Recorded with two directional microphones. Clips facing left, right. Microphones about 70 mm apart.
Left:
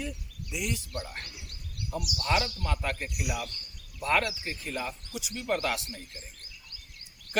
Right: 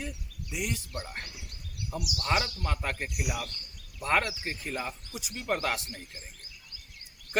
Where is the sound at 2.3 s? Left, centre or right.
Right.